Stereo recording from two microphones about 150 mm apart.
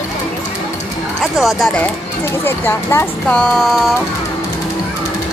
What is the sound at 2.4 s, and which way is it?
Speech, 15° left (ahead or behind).